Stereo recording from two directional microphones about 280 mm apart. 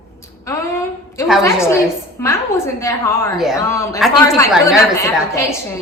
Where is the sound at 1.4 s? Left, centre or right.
Centre.